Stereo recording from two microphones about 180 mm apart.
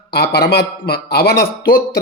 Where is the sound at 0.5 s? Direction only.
60° left (ahead or behind).